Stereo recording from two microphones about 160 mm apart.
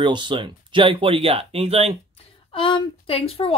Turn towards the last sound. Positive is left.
turn(degrees=35)  # may be behind; listen again after turning